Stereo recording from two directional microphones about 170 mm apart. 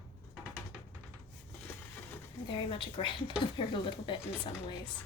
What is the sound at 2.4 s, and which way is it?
Speech, 30° left (ahead or behind).